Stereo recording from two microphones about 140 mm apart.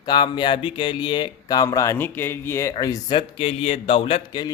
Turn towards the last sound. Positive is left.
turn(degrees=35)  # may be behind; listen again after turning